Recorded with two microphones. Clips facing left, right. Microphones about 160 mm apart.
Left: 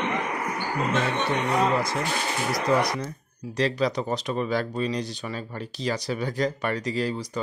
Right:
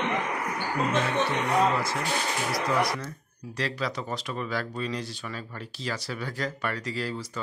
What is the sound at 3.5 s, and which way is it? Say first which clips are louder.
Speech: left 7 dB; 20° left (ahead or behind).